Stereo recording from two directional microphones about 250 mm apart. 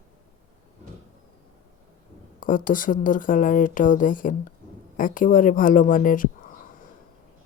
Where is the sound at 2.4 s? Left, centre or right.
Left.